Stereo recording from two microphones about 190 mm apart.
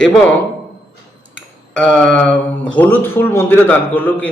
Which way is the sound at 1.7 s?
5° left (ahead or behind).